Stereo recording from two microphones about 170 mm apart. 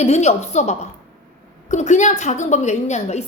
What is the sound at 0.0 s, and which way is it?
A woman's voice, 40° left (ahead or behind).